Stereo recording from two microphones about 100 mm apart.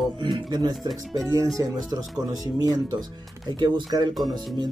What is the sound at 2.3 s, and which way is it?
Speech, 40° right (ahead or behind).